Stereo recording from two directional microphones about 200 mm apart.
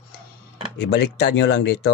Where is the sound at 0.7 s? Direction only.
55° left (ahead or behind).